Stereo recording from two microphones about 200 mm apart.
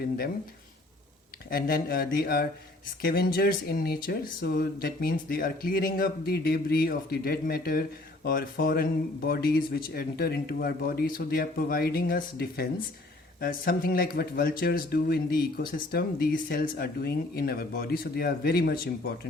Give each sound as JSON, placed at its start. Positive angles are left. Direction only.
{"t": 1.5, "sound": "speech", "side_deg": 50}